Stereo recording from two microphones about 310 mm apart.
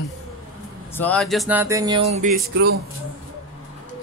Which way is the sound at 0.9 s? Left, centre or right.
Centre.